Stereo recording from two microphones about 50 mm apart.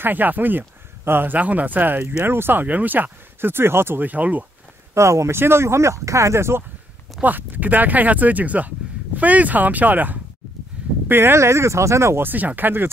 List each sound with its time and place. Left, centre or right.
0.0 s speech: right
1.4 s speech: right
4.0 s speech: right
4.9 s speech: right
5.4 s speech: right
7.2 s speech: right
11.1 s speech: right
11.3 s speech: right
12.2 s speech: right